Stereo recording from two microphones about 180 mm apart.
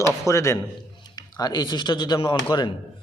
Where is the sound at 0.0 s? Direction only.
15° left (ahead or behind).